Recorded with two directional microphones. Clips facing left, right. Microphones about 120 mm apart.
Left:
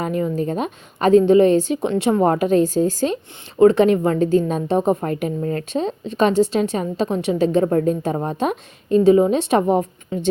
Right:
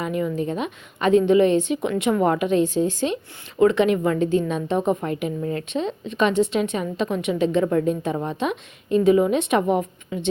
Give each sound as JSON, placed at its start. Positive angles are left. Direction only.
{"t": 0.0, "sound": "a woman's voice", "side_deg": 35}